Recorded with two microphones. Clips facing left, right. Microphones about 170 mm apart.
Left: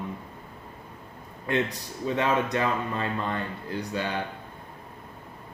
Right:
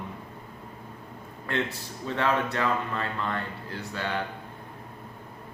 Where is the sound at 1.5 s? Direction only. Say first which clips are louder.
Left 3 dB; 15° left (ahead or behind).